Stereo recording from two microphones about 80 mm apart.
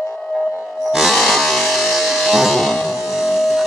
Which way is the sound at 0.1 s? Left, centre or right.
Centre.